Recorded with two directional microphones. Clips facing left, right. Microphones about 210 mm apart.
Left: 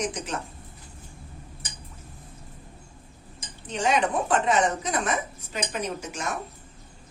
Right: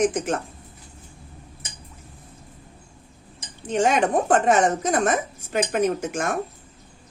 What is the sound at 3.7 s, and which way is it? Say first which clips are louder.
A woman's voice: right 5 dB; 50° right (ahead or behind).